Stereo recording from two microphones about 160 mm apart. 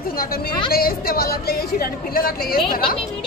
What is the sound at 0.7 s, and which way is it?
A woman's voice, 70° left (ahead or behind).